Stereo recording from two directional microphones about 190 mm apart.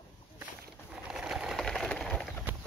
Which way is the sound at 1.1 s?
5° right (ahead or behind).